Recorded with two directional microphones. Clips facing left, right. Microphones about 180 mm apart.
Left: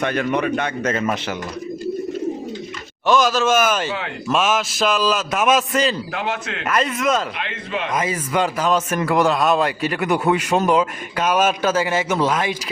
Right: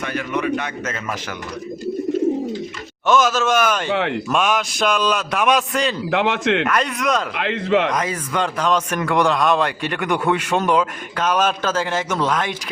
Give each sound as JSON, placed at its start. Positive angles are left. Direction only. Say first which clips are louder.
{"t": 0.1, "sound": "a man's voice", "louder": "left 2 dB", "side_deg": 35}
{"t": 3.1, "sound": "a man's voice", "louder": "even", "side_deg": 0}
{"t": 3.8, "sound": "a man's voice", "louder": "right 6 dB", "side_deg": -70}
{"t": 4.3, "sound": "a man's voice", "louder": "left 5 dB", "side_deg": 0}
{"t": 6.1, "sound": "a man's voice", "louder": "right 7 dB", "side_deg": -85}
{"t": 6.7, "sound": "a man's voice", "louder": "left 1 dB", "side_deg": 0}
{"t": 7.3, "sound": "a man's voice", "louder": "right 8 dB", "side_deg": -70}
{"t": 7.9, "sound": "a man's voice", "louder": "even", "side_deg": 5}